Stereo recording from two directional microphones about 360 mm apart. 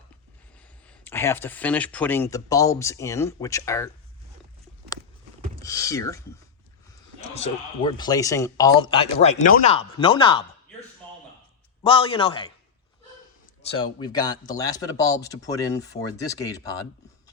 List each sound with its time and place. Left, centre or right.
0.9 s a man's voice: centre
5.5 s a man's voice: centre
13.6 s a man's voice: centre